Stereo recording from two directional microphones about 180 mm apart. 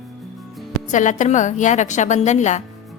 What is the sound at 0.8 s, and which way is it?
A woman's voice, 45° left (ahead or behind).